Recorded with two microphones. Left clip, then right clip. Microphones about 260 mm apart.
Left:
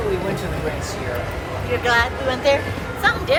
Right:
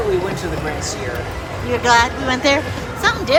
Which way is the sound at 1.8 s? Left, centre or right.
Right.